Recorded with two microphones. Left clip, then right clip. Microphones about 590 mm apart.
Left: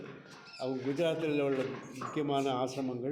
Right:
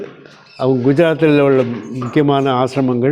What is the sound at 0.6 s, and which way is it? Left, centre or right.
Speech, right.